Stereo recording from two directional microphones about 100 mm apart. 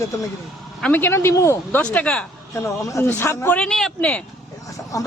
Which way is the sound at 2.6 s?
25° left (ahead or behind).